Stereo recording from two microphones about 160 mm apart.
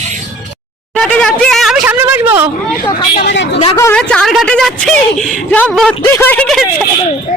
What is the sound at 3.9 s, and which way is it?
A woman's voice, 5° left (ahead or behind).